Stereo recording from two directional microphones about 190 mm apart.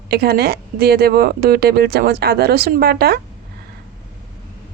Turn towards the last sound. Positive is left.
turn(degrees=-55)  # may be behind; listen again after turning